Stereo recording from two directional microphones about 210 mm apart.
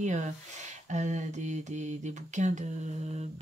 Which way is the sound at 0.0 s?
35° right (ahead or behind).